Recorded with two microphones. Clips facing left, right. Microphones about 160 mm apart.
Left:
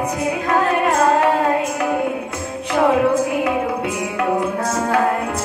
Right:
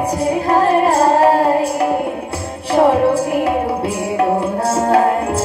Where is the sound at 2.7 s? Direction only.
30° right (ahead or behind).